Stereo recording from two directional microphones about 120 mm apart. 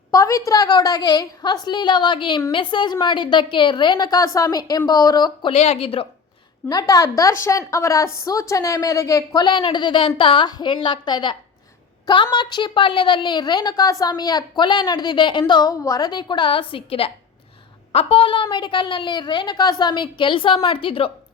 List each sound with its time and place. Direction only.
0.1 s a woman's voice: 25° left (ahead or behind)
5.5 s a woman's voice: 60° left (ahead or behind)
6.7 s a woman's voice: 35° left (ahead or behind); by 21.1 s 50° left (ahead or behind)